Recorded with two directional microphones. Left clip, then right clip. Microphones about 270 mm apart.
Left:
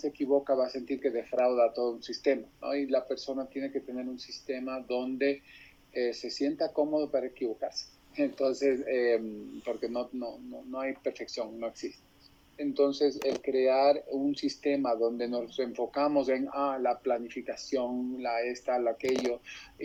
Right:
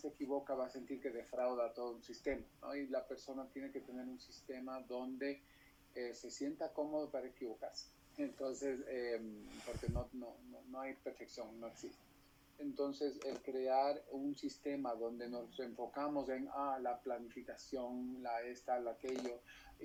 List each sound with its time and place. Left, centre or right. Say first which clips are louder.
0.0 s a man's voice: left 14 dB; left